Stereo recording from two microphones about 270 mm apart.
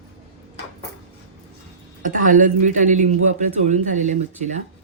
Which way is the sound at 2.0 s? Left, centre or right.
Right.